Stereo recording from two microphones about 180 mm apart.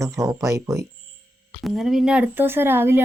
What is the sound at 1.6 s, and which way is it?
Speech, centre (ahead or behind).